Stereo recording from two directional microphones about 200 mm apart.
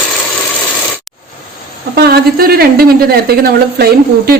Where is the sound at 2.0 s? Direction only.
50° right (ahead or behind).